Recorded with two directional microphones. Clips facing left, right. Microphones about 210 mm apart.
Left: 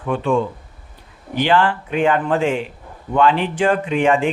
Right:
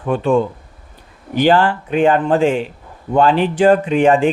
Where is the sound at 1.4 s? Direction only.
40° right (ahead or behind).